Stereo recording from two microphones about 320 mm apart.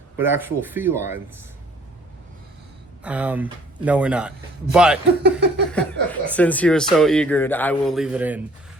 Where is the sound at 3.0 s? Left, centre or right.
Centre.